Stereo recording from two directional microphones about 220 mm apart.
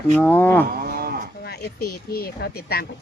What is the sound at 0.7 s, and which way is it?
Speech, 45° right (ahead or behind).